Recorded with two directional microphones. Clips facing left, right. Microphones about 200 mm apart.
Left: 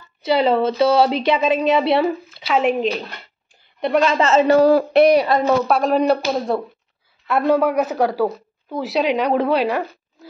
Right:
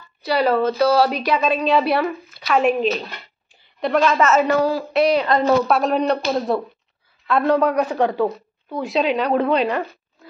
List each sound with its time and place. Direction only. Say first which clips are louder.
0.2 s a woman's voice: left 2 dB; 25° left (ahead or behind)
4.6 s speech: left 6 dB; 55° left (ahead or behind)
5.1 s a woman's voice: left 1 dB; 10° left (ahead or behind)